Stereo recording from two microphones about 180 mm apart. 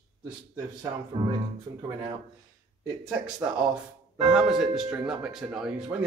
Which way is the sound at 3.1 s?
5° right (ahead or behind).